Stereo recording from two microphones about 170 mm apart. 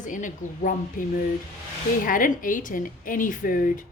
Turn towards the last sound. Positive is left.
turn(degrees=55)  # may be behind; listen again after turning